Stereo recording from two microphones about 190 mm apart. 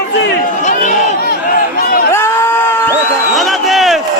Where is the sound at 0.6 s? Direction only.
40° left (ahead or behind).